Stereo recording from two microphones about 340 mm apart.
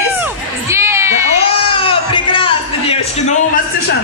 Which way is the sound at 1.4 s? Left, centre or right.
Centre.